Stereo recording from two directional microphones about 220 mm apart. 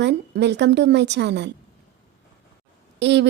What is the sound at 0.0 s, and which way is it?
A woman's voice, 50° right (ahead or behind).